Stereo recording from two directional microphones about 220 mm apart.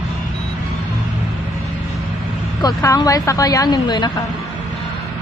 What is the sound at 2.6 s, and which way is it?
A woman's voice, 15° left (ahead or behind).